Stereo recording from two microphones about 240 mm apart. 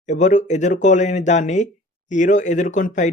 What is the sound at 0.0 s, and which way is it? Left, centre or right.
Speech, left.